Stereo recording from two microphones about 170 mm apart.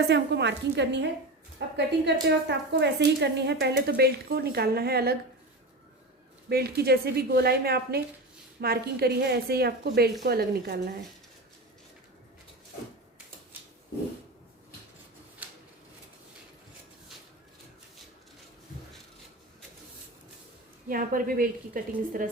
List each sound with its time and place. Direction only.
0.1 s a woman's voice: 90° right
1.5 s a woman's voice: 80° right
6.5 s speech: 65° right (ahead or behind)
20.8 s a woman's voice: 55° right (ahead or behind)